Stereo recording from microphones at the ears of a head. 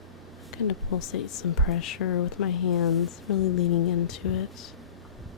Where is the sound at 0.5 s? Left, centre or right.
Left.